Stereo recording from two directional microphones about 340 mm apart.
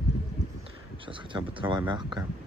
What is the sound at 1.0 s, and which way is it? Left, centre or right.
Speech, centre.